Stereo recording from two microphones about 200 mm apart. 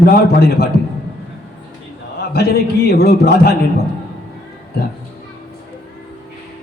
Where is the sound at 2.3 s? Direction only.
50° left (ahead or behind).